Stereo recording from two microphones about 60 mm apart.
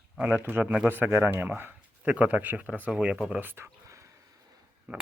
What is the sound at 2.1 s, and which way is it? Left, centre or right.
Speech, right.